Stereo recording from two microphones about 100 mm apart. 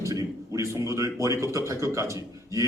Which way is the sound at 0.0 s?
35° right (ahead or behind).